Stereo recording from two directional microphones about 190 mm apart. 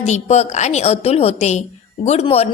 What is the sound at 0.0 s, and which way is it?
A woman's voice, 35° left (ahead or behind).